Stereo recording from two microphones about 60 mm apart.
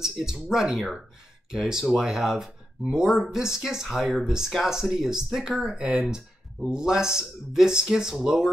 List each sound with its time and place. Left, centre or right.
0.0 s speech: centre